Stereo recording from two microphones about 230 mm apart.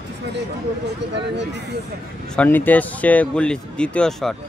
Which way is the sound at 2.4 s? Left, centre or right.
Centre.